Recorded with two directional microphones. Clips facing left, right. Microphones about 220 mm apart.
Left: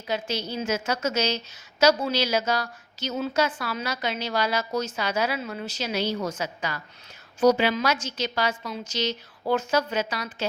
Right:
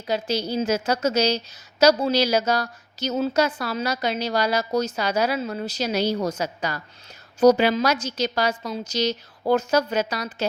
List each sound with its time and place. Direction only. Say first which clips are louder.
0.1 s a woman's voice: right 5 dB; 35° right (ahead or behind)